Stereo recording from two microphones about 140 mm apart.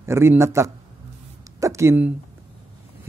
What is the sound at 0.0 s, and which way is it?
A man's voice, 20° right (ahead or behind).